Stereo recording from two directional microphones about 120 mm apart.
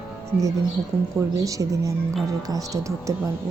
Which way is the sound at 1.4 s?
30° right (ahead or behind).